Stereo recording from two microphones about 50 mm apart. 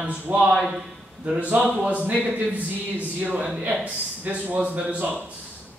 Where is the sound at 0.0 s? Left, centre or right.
Right.